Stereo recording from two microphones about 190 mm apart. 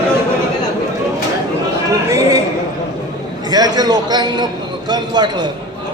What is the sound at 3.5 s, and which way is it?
A man's voice, 20° right (ahead or behind).